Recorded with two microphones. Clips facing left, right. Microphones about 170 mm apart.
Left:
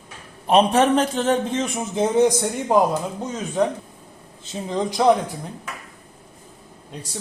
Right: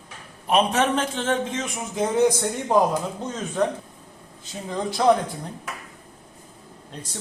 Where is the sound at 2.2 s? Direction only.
15° left (ahead or behind).